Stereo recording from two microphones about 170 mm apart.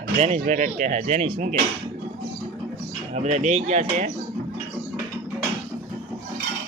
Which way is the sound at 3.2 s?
45° right (ahead or behind).